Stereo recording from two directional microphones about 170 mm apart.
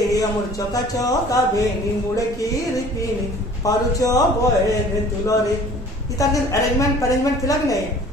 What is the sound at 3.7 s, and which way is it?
Speech, 20° left (ahead or behind).